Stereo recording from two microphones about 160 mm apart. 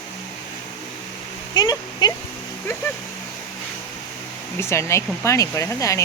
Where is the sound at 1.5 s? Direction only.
25° left (ahead or behind).